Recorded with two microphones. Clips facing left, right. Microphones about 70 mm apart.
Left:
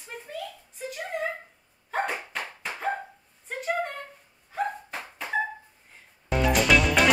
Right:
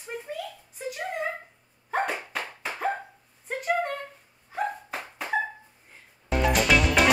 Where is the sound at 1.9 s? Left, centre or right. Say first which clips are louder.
Right 1 dB; centre.